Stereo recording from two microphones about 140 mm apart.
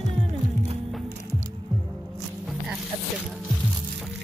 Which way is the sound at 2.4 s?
5° right (ahead or behind).